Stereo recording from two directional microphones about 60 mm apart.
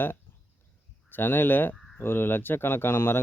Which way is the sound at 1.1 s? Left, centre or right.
Left.